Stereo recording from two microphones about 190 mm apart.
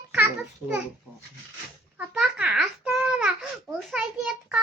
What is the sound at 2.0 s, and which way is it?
Babbling, 5° right (ahead or behind).